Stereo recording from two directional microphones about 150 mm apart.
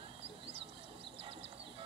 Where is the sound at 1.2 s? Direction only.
40° right (ahead or behind).